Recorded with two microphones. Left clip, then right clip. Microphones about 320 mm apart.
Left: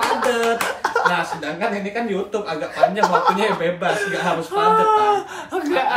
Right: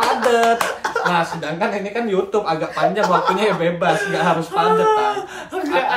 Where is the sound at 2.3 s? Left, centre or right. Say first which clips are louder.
Right 3 dB; centre.